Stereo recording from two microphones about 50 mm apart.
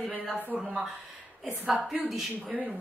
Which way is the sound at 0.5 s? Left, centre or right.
Centre.